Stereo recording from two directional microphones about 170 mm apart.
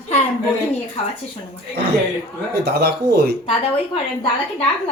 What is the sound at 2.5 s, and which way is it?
Speech, 70° right (ahead or behind).